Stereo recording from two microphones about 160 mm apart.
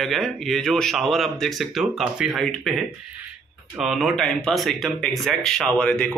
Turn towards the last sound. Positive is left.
turn(degrees=5)  # may be behind; listen again after turning